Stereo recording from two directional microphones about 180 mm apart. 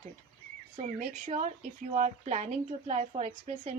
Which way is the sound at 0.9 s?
40° right (ahead or behind).